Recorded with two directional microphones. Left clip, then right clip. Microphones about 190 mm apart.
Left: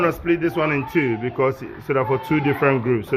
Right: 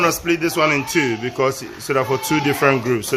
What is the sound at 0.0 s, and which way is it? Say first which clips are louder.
Speech: right 2 dB; 15° right (ahead or behind).